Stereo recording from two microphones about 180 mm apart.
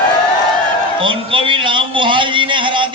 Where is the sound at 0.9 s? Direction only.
30° right (ahead or behind).